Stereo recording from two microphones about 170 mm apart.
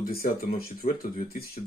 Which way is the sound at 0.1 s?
60° left (ahead or behind).